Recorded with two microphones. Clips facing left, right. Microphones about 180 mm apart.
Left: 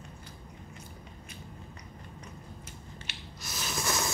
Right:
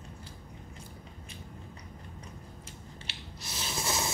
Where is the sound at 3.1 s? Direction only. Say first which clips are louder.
Left 1 dB; 30° right (ahead or behind).